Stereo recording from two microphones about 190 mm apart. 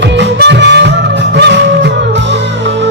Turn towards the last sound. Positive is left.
turn(degrees=-65)  # may be behind; listen again after turning